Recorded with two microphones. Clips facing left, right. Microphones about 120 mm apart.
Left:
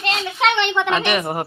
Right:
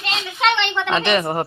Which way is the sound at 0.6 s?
10° left (ahead or behind).